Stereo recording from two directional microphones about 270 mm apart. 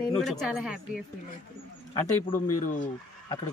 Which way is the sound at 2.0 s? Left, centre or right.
Centre.